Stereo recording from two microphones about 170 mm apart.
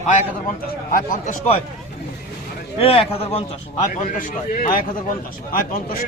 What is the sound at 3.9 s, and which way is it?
A man's voice, 50° left (ahead or behind).